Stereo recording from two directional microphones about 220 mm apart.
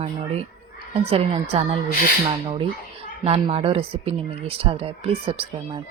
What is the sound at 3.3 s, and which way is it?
Speech, 25° right (ahead or behind).